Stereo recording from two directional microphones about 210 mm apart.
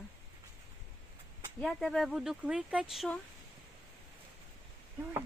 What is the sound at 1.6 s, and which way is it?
Speech, centre (ahead or behind).